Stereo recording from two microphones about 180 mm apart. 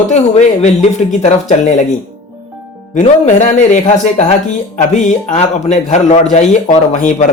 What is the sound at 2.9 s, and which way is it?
Speech, 40° left (ahead or behind).